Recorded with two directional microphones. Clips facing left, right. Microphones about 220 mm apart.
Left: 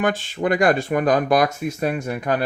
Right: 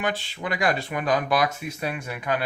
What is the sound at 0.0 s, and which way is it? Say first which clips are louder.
Speech: left 7 dB; 45° left (ahead or behind).